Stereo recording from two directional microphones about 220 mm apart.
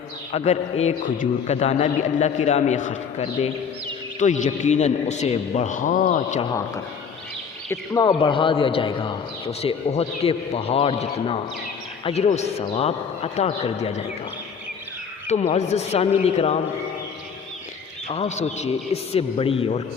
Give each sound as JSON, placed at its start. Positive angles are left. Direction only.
{"t": 0.3, "sound": "a man's voice", "side_deg": 30}
{"t": 7.7, "sound": "a man's voice", "side_deg": 15}
{"t": 15.3, "sound": "a man's voice", "side_deg": 30}
{"t": 18.1, "sound": "a man's voice", "side_deg": 30}